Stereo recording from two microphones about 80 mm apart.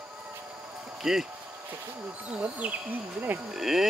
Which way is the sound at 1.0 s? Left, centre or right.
Centre.